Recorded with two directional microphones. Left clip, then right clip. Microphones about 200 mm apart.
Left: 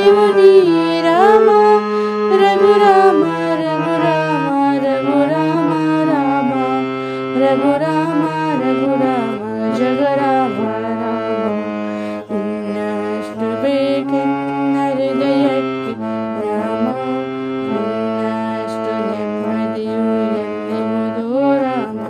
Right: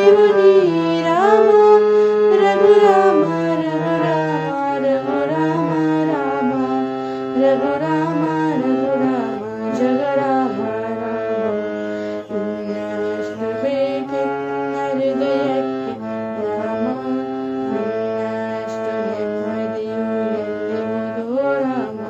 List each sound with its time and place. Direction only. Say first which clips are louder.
0.0 s music: left 2 dB; 50° left (ahead or behind)
13.7 s music: left 4 dB; 50° left (ahead or behind)